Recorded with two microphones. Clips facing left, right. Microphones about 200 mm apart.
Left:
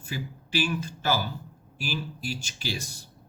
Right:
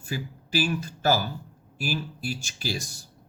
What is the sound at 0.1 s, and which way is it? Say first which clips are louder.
Speech: right 2 dB; 40° right (ahead or behind).